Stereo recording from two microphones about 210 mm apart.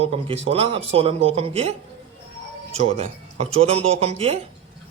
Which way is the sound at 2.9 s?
25° right (ahead or behind).